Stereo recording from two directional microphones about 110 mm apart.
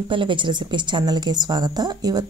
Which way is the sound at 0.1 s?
50° right (ahead or behind).